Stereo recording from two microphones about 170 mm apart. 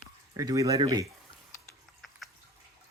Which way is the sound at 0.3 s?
20° right (ahead or behind).